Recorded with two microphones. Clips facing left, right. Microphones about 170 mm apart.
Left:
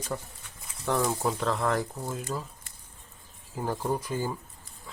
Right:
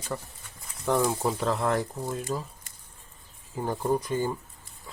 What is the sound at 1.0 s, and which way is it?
Speech, 10° right (ahead or behind).